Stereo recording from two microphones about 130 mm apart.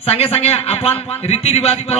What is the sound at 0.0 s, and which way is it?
A man's voice, 50° left (ahead or behind).